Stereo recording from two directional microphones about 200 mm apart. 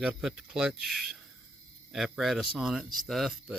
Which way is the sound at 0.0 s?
5° right (ahead or behind).